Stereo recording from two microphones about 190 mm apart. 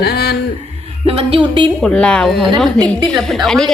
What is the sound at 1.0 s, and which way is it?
Speech, 30° right (ahead or behind).